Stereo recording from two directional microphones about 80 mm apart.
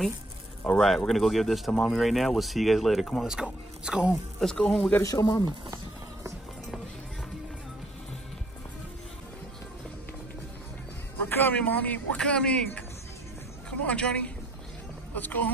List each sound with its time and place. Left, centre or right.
0.7 s speech: centre
4.1 s speech: centre
5.2 s speech: left
11.2 s speech: left